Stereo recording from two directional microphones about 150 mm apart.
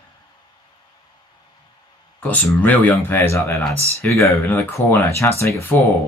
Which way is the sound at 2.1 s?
10° left (ahead or behind).